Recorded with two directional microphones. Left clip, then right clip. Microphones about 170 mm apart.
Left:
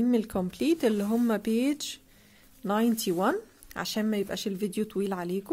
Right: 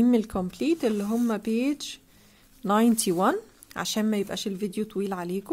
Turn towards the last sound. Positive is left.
turn(degrees=0)  # may be behind; listen again after turning